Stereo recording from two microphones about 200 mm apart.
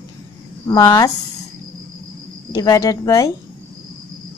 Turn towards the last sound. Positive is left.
turn(degrees=15)  # may be behind; listen again after turning